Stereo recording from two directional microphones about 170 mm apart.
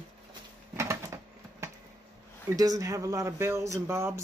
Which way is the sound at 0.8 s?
15° right (ahead or behind).